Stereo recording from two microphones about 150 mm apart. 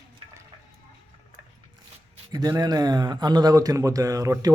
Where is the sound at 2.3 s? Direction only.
25° right (ahead or behind).